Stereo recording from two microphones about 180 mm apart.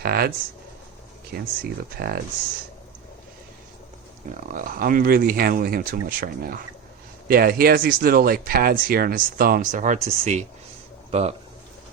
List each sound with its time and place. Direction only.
0.0 s speech: 60° right (ahead or behind)
1.8 s speech: 60° right (ahead or behind)
4.5 s speech: 50° right (ahead or behind)